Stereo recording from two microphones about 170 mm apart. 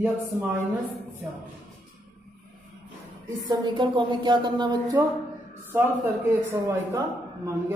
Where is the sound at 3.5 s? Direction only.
25° right (ahead or behind).